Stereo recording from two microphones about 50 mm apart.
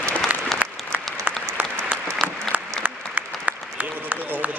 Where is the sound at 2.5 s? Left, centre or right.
Right.